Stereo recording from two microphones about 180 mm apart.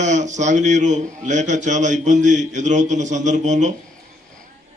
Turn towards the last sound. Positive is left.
turn(degrees=-40)  # may be behind; listen again after turning